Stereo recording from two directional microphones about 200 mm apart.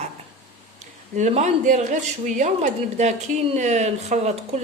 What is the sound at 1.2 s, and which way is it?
Speech, 35° right (ahead or behind).